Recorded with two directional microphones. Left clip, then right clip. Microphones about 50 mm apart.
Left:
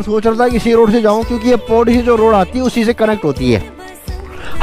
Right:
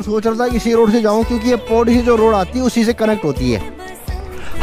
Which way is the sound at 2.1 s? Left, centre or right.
Centre.